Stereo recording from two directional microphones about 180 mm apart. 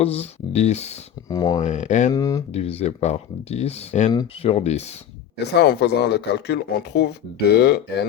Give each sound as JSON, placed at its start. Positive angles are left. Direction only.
{"t": 0.0, "sound": "speech", "side_deg": 35}
{"t": 1.3, "sound": "speech", "side_deg": 20}
{"t": 1.6, "sound": "speech", "side_deg": 40}
{"t": 2.1, "sound": "speech", "side_deg": 20}
{"t": 2.5, "sound": "speech", "side_deg": 35}
{"t": 4.1, "sound": "speech", "side_deg": 20}
{"t": 4.5, "sound": "speech", "side_deg": 35}
{"t": 5.5, "sound": "speech", "side_deg": 65}